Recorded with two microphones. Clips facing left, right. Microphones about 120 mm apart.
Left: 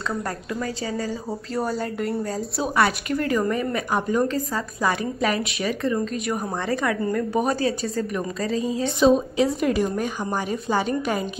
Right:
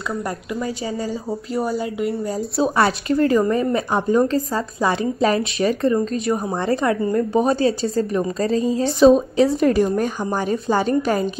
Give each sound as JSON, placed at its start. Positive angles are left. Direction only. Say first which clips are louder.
{"t": 0.6, "sound": "a woman's voice", "louder": "right 2 dB", "side_deg": -25}
{"t": 1.5, "sound": "speech", "louder": "right 3 dB", "side_deg": -5}
{"t": 2.6, "sound": "a woman's voice", "louder": "right 3 dB", "side_deg": -30}